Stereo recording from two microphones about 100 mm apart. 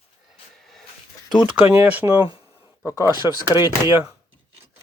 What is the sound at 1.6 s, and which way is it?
Speech, 20° right (ahead or behind).